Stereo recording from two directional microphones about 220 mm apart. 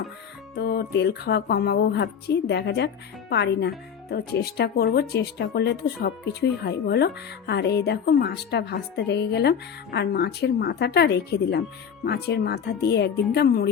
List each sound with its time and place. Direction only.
0.5 s a woman's voice: 45° left (ahead or behind)